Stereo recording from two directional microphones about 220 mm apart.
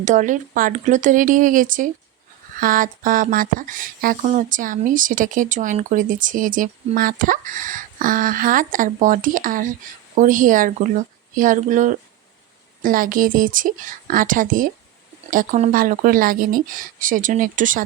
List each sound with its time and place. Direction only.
0.0 s speech: 35° right (ahead or behind)